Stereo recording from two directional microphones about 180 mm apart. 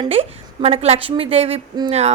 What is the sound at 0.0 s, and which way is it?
A woman's voice, 30° right (ahead or behind).